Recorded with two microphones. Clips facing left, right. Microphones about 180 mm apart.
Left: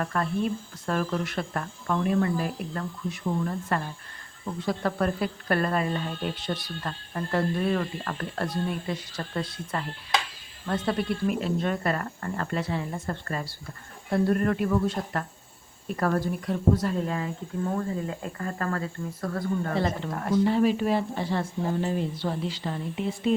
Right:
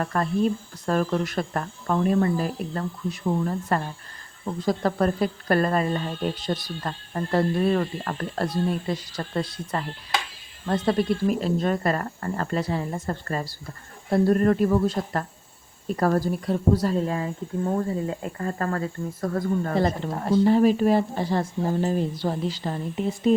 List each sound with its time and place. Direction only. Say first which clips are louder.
0.0 s speech: right 4 dB; 40° right (ahead or behind)